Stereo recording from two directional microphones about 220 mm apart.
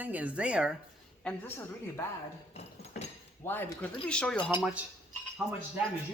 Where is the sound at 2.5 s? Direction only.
30° left (ahead or behind).